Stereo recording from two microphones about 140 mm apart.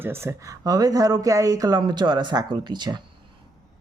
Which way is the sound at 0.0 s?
15° right (ahead or behind).